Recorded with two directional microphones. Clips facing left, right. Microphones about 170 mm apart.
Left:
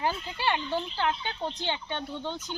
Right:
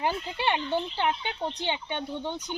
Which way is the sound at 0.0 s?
20° right (ahead or behind).